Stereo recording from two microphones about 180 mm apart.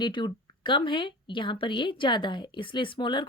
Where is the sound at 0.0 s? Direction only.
25° left (ahead or behind).